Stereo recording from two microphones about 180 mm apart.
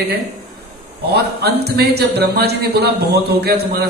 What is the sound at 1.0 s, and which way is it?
A man's voice, 65° right (ahead or behind).